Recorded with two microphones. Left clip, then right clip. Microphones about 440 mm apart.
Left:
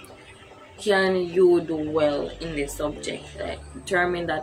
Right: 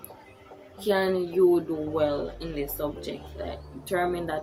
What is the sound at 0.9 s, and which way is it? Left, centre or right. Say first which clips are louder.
Speech: left 4 dB; right.